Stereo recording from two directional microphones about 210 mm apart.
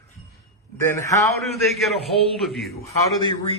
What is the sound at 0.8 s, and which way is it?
Speech, 15° left (ahead or behind).